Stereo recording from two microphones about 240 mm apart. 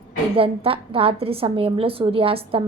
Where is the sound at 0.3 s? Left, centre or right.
Right.